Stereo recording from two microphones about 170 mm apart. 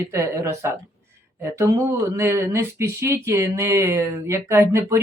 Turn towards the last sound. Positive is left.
turn(degrees=-15)  # may be behind; listen again after turning